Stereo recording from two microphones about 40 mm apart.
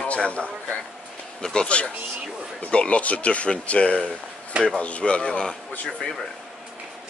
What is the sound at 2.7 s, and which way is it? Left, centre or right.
A man's voice, left.